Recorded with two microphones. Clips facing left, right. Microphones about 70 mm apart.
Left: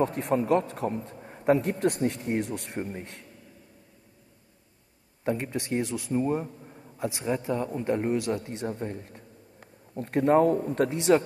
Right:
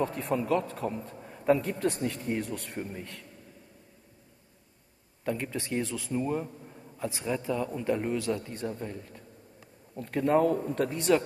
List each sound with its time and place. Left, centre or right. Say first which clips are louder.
0.0 s speech: left 4 dB; left
1.2 s a sound: left 2 dB; left
1.9 s speech: left 3 dB; left
5.2 s speech: left 3 dB; left
6.4 s a sound: left 1 dB; centre
7.2 s a man's voice: left 2 dB; left